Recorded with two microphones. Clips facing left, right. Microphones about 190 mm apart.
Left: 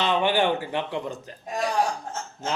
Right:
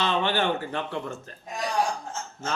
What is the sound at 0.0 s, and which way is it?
A man's voice, 15° left (ahead or behind).